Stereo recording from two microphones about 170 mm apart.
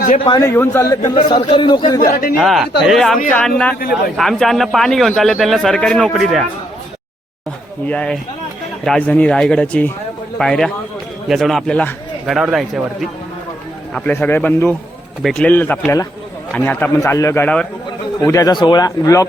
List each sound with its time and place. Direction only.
0.3 s a man's voice: 20° left (ahead or behind)
2.0 s speech: 55° left (ahead or behind)
2.4 s a man's voice: centre (ahead or behind)
4.2 s a man's voice: centre (ahead or behind)
7.9 s a man's voice: 5° left (ahead or behind)
13.9 s a man's voice: 10° left (ahead or behind)
18.2 s speech: 20° left (ahead or behind)